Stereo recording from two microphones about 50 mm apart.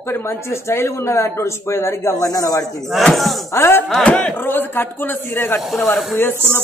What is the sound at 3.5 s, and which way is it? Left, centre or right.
Speech, left.